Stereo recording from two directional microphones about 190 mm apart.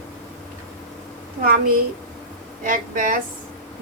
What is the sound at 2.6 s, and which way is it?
Speech, 45° right (ahead or behind).